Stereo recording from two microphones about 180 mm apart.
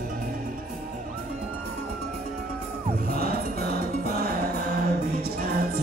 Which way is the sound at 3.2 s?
55° right (ahead or behind).